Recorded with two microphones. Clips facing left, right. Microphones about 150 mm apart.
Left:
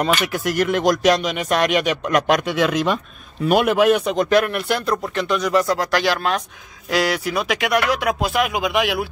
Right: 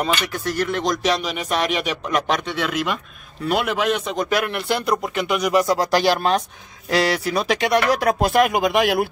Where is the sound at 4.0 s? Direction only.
5° right (ahead or behind).